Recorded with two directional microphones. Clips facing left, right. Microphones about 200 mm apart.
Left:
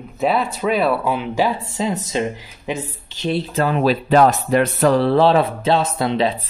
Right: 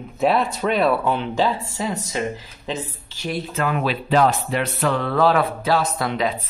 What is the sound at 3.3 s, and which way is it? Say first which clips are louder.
Speech: left 4 dB; 30° left (ahead or behind).